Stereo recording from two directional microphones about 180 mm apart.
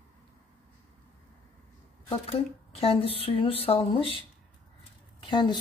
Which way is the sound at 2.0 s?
35° left (ahead or behind).